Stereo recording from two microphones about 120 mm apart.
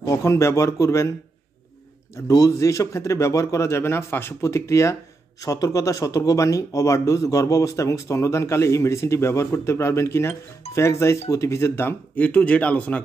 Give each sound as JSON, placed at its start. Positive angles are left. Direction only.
{"t": 0.0, "sound": "speech", "side_deg": 25}
{"t": 2.1, "sound": "speech", "side_deg": 30}